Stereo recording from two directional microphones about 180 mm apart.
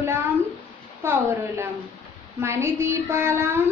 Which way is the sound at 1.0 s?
15° right (ahead or behind).